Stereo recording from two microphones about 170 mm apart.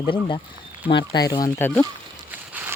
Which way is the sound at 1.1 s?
20° left (ahead or behind).